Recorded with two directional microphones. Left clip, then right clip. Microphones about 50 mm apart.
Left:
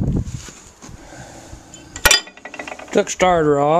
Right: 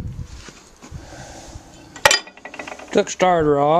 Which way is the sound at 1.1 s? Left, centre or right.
Right.